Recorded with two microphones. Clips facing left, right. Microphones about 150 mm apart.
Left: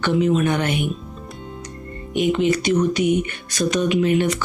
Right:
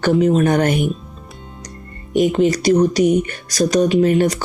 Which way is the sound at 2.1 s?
40° right (ahead or behind).